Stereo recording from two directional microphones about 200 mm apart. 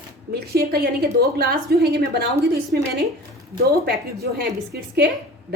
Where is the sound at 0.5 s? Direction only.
50° right (ahead or behind).